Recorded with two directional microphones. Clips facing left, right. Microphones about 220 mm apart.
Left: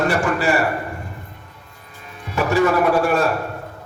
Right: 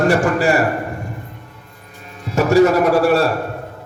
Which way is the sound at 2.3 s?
40° right (ahead or behind).